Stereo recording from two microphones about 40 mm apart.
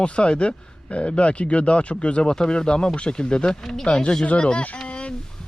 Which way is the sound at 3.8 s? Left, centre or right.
Left.